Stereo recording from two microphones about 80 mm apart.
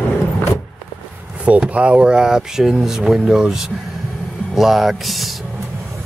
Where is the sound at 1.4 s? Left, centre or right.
Centre.